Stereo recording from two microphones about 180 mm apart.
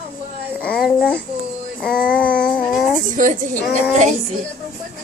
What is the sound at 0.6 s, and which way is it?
Speech, 5° left (ahead or behind).